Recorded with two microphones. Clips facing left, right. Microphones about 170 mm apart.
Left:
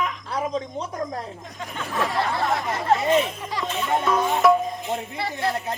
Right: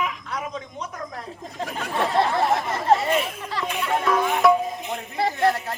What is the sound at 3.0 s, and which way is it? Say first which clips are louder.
Speech: left 3 dB; 15° left (ahead or behind).